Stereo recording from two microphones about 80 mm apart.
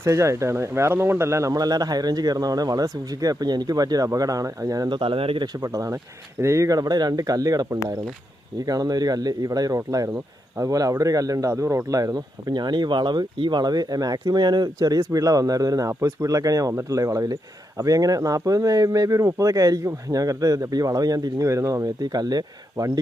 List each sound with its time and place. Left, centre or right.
0.0 s speech: right
4.9 s speech: right
5.5 s speech: right